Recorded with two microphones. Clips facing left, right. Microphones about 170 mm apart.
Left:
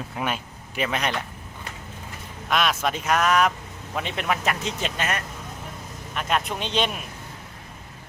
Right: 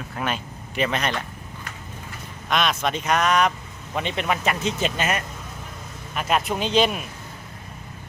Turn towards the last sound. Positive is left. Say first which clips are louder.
# right 5 dB
turn(degrees=0)  # may be behind; listen again after turning